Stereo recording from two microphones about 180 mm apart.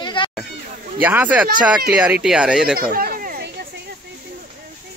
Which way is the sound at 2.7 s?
55° right (ahead or behind).